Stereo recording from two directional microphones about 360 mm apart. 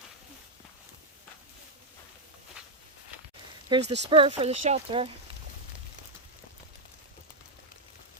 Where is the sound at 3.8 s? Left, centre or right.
Right.